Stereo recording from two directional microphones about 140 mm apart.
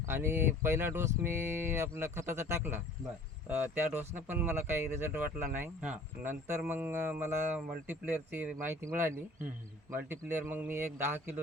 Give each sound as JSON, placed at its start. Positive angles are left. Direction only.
{"t": 0.0, "sound": "speech", "side_deg": -15}